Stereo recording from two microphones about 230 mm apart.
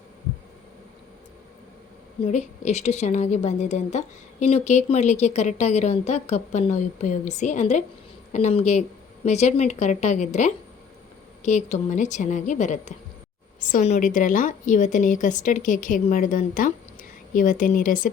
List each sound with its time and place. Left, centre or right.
2.2 s a woman's voice: left